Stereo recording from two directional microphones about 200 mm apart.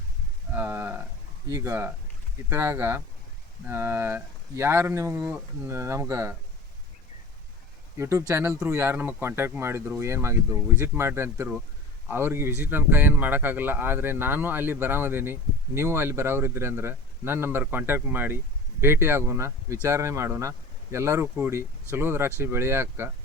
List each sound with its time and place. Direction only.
0.5 s a sound: 10° right (ahead or behind)
1.5 s speech: 15° right (ahead or behind)
7.9 s speech: 15° right (ahead or behind)